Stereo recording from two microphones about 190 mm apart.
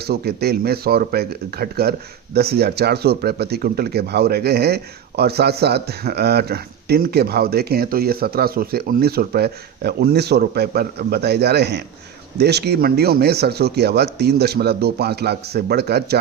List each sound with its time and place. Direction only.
0.0 s speech: 55° right (ahead or behind)